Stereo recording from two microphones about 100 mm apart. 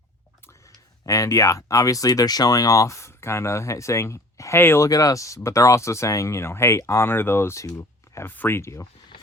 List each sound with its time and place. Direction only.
1.0 s speech: 35° left (ahead or behind)
4.9 s speech: 35° left (ahead or behind)
7.8 s a sound: 30° left (ahead or behind)
8.4 s speech: 25° left (ahead or behind)